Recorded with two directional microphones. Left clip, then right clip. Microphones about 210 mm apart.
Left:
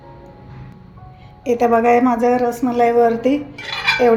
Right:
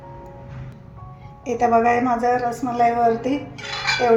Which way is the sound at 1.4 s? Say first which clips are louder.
Left 3 dB; 40° left (ahead or behind).